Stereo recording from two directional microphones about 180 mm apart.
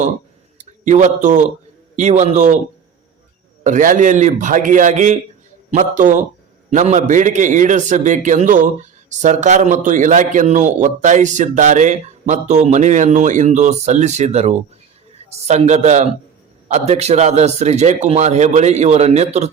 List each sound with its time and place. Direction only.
0.6 s a man's voice: 40° right (ahead or behind)
3.6 s a man's voice: 45° right (ahead or behind)